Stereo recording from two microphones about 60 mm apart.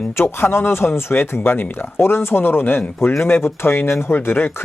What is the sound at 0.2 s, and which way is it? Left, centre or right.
Speech, left.